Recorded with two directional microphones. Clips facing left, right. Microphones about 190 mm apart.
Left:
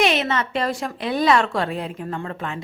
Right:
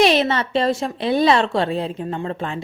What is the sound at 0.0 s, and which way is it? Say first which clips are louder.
Speech: right 4 dB; 35° right (ahead or behind).